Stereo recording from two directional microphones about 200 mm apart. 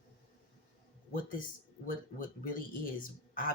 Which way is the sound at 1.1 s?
45° left (ahead or behind).